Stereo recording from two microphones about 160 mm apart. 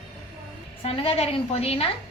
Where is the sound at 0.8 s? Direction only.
40° left (ahead or behind).